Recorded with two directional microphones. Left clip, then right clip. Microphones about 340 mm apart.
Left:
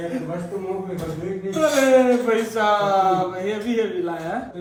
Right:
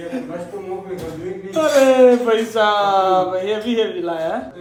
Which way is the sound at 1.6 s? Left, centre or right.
Centre.